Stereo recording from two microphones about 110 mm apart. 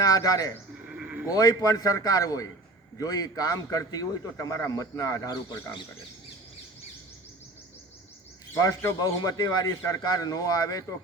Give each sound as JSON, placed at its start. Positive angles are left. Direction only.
{"t": 0.0, "sound": "speech", "side_deg": 35}
{"t": 0.9, "sound": "sheep", "side_deg": -10}
{"t": 1.3, "sound": "a man's voice", "side_deg": 35}
{"t": 8.8, "sound": "a man's voice", "side_deg": 30}